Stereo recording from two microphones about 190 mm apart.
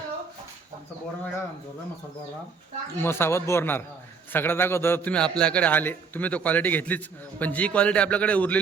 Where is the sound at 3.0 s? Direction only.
10° left (ahead or behind).